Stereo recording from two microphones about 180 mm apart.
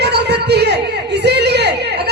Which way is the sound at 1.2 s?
65° right (ahead or behind).